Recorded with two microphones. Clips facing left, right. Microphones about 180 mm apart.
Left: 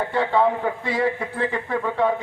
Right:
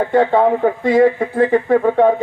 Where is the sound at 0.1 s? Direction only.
45° right (ahead or behind).